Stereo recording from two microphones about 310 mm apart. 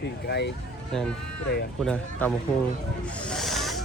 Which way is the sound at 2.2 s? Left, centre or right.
Centre.